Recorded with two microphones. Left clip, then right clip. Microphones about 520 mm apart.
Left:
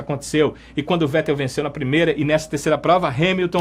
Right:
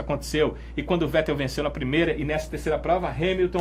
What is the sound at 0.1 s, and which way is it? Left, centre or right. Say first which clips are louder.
Speech: left 5 dB; left.